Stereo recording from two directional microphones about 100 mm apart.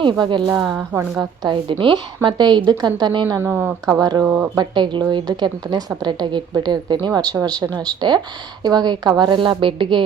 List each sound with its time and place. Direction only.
0.0 s speech: 50° right (ahead or behind)
0.8 s speech: 30° right (ahead or behind)
1.7 s a woman's voice: 55° right (ahead or behind); by 4.2 s 40° right (ahead or behind)
4.2 s speech: 20° right (ahead or behind)
4.5 s speech: 50° right (ahead or behind)